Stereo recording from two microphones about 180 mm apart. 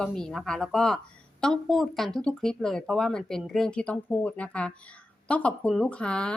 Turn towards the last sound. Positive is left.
turn(degrees=5)  # may be behind; listen again after turning